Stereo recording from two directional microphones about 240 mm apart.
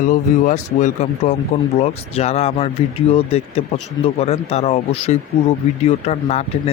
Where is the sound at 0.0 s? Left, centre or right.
Left.